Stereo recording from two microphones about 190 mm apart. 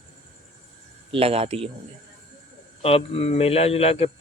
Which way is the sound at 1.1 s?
30° right (ahead or behind).